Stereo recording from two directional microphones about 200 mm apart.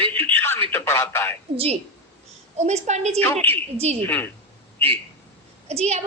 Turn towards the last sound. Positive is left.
turn(degrees=-35)  # may be behind; listen again after turning